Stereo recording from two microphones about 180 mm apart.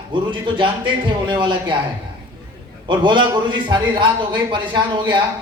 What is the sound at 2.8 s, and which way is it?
A man's voice, 25° right (ahead or behind).